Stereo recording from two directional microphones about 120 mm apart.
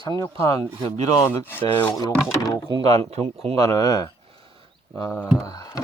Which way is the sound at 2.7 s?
40° right (ahead or behind).